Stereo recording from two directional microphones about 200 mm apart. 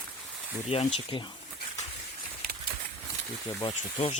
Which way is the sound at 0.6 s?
30° left (ahead or behind).